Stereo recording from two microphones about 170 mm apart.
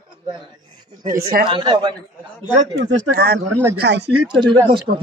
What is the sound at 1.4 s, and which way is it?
Speech, 25° right (ahead or behind).